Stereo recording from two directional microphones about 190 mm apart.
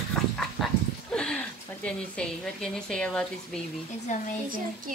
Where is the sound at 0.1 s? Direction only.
Centre (ahead or behind).